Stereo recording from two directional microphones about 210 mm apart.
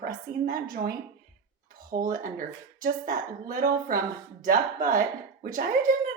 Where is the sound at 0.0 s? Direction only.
40° right (ahead or behind).